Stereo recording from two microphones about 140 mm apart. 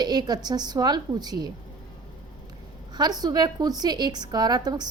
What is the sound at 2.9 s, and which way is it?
A woman's voice, 30° right (ahead or behind).